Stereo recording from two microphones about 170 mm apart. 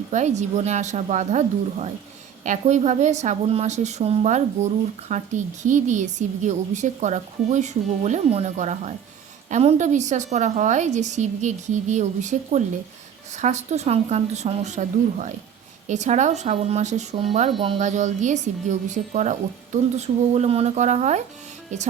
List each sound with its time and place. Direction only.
0.1 s a woman's voice: 45° right (ahead or behind)